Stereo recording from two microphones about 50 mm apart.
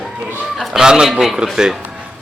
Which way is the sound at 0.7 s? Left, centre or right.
Centre.